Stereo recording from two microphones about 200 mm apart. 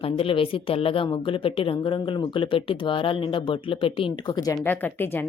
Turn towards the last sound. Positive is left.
turn(degrees=10)  # may be behind; listen again after turning